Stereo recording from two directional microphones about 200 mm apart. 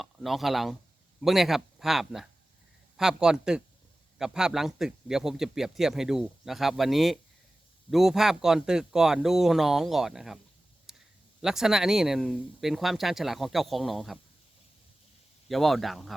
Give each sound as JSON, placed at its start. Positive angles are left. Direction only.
{"t": 0.0, "sound": "a man's voice", "side_deg": 0}
{"t": 10.9, "sound": "a sound", "side_deg": 0}
{"t": 11.4, "sound": "a man's voice", "side_deg": 0}
{"t": 15.4, "sound": "a man's voice", "side_deg": 0}